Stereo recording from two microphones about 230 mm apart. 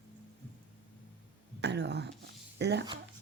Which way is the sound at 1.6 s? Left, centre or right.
Right.